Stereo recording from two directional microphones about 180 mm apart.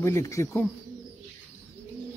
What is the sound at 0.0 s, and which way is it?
Speech, 15° left (ahead or behind).